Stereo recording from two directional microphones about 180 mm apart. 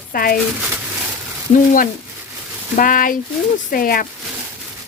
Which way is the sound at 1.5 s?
45° left (ahead or behind).